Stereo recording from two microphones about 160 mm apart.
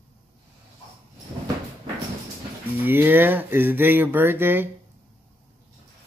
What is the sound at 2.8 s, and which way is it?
Speech, 10° right (ahead or behind).